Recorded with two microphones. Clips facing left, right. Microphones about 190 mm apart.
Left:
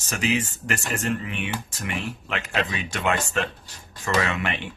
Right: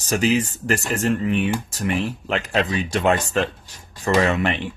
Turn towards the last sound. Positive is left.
turn(degrees=-35)  # may be behind; listen again after turning